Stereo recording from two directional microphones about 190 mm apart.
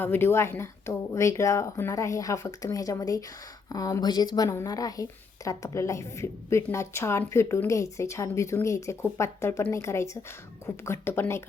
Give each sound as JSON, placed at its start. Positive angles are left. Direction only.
{"t": 0.0, "sound": "a woman's voice", "side_deg": 10}